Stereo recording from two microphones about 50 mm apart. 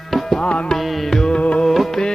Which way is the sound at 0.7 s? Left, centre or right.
Centre.